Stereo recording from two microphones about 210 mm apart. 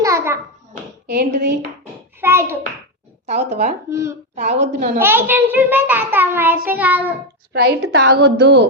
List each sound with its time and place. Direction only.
0.0 s hands: 15° right (ahead or behind)
1.0 s speech: 50° right (ahead or behind)
2.2 s a child's voice: 10° right (ahead or behind)
3.2 s a woman's voice: 30° right (ahead or behind)
3.8 s a child's voice: 15° right (ahead or behind)
4.4 s a woman's voice: 30° right (ahead or behind)
4.9 s a child's voice: 10° right (ahead or behind)
7.5 s a woman's voice: 50° right (ahead or behind)